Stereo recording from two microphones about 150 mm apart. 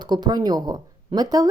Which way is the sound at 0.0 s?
30° right (ahead or behind).